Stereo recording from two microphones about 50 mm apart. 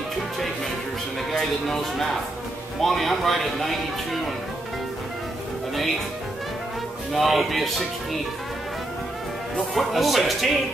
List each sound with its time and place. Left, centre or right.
1.3 s speech: centre
7.1 s speech: centre
9.8 s speech: centre